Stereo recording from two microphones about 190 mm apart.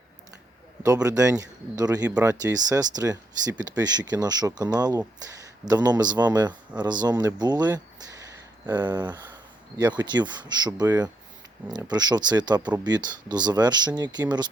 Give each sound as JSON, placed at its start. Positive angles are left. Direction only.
{"t": 0.8, "sound": "a man's voice", "side_deg": -15}
{"t": 2.0, "sound": "a man's voice", "side_deg": -5}
{"t": 2.9, "sound": "speech", "side_deg": -20}
{"t": 7.7, "sound": "a sound", "side_deg": -20}
{"t": 8.9, "sound": "speech", "side_deg": -20}